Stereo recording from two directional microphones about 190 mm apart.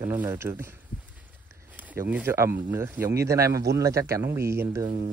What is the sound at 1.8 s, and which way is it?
Speech, 10° right (ahead or behind).